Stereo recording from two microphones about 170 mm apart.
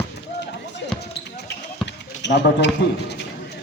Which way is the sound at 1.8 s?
90° left.